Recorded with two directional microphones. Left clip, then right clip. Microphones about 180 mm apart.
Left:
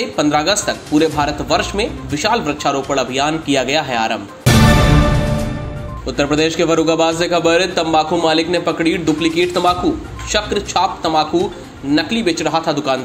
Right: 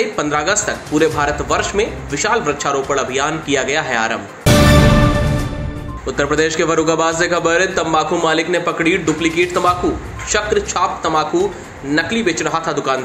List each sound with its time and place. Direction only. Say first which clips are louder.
0.1 s speech: left 2 dB; 55° left (ahead or behind)
4.5 s music: right 1 dB; centre (ahead or behind)
6.0 s speech: even; 45° left (ahead or behind)